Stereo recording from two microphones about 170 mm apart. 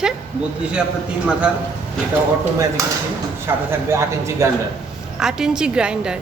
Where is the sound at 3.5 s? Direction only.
15° right (ahead or behind).